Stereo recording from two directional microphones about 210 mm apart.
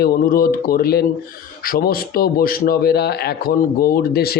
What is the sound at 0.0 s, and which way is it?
Speech, 45° left (ahead or behind).